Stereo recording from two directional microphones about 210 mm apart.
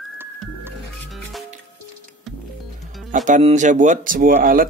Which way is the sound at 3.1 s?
35° right (ahead or behind).